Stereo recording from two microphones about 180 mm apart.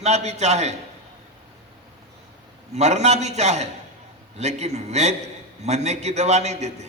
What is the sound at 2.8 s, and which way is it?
A man's voice, 40° right (ahead or behind).